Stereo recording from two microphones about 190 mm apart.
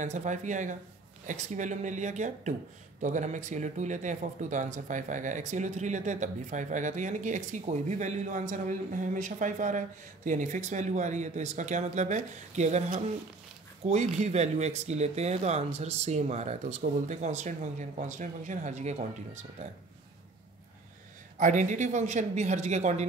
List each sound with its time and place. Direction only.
0.0 s speech: 40° right (ahead or behind)
21.4 s speech: 40° right (ahead or behind)